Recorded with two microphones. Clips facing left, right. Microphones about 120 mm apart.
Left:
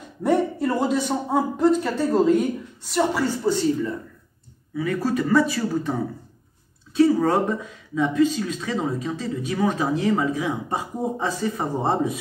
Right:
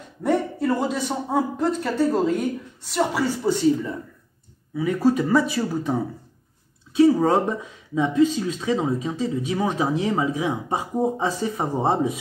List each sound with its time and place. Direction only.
0.2 s speech: centre (ahead or behind); by 12.1 s 15° right (ahead or behind)